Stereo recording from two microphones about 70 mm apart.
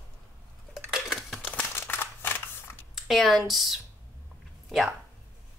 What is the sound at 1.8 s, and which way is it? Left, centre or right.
Scissors, left.